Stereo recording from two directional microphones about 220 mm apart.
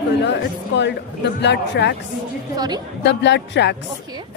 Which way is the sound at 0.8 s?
50° left (ahead or behind).